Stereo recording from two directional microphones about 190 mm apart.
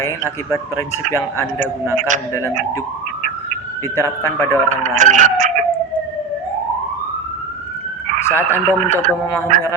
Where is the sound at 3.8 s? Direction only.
15° left (ahead or behind).